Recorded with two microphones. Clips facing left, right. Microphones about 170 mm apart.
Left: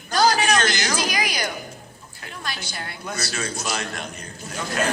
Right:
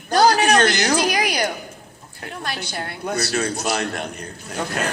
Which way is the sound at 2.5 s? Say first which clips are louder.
Right 4 dB; 60° right (ahead or behind).